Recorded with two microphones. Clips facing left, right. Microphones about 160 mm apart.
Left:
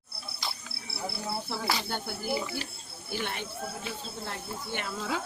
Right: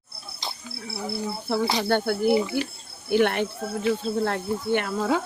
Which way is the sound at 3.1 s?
60° right (ahead or behind).